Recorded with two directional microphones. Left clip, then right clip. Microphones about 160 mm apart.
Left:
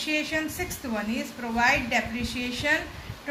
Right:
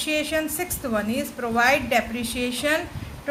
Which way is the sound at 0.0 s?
55° right (ahead or behind).